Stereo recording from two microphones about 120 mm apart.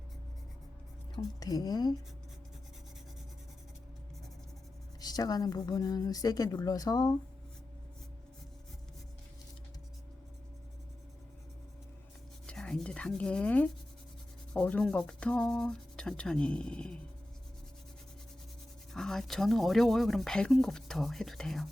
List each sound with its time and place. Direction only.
1.1 s speech: 30° left (ahead or behind)
4.9 s speech: 35° left (ahead or behind)
12.5 s sanding: 5° left (ahead or behind)
14.5 s speech: 10° left (ahead or behind)
18.9 s speech: 5° left (ahead or behind)